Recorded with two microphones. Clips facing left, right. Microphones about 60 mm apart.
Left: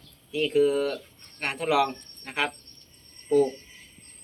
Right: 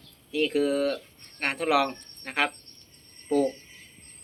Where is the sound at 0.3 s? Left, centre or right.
Right.